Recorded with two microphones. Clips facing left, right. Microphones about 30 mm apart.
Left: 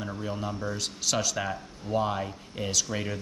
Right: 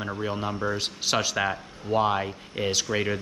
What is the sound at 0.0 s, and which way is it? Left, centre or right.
A man's voice, right.